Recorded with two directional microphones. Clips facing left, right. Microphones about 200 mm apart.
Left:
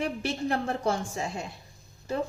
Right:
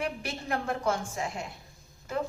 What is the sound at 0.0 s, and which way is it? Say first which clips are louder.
A woman's voice: left 5 dB; 35° left (ahead or behind).